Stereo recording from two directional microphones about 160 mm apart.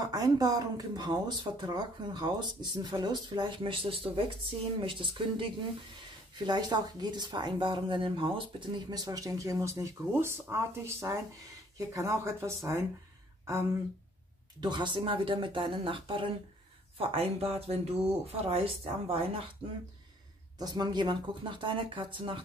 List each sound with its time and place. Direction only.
0.0 s speech: 20° right (ahead or behind)
14.6 s speech: 30° right (ahead or behind)
20.5 s speech: 25° right (ahead or behind)